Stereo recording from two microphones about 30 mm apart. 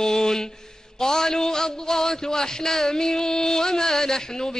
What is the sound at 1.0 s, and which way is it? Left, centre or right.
A man's voice, centre.